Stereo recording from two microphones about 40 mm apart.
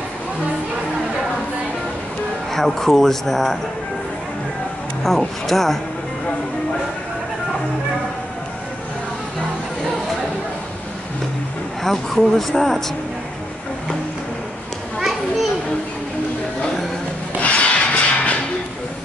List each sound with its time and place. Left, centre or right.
2.5 s speech: centre
5.5 s speech: centre
11.8 s speech: centre
15.0 s children playing: centre
17.4 s music: left